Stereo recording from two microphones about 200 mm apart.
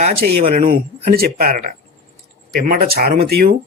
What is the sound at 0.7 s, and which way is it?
Speech, 45° right (ahead or behind).